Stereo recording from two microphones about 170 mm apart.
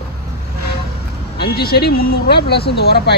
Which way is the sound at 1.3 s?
70° left (ahead or behind).